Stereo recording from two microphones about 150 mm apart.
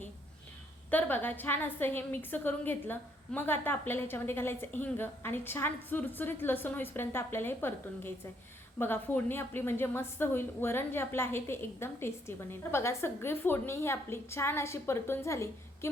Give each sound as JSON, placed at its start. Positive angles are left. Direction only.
{"t": 0.9, "sound": "a woman's voice", "side_deg": 10}